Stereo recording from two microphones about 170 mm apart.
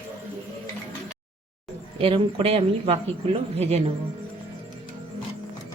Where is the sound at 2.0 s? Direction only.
35° right (ahead or behind).